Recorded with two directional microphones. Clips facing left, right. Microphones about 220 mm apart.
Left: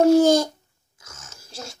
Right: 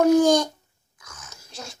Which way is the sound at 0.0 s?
25° left (ahead or behind).